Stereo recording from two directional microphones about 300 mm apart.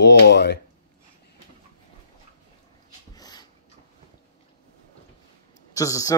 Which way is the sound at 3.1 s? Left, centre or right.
Centre.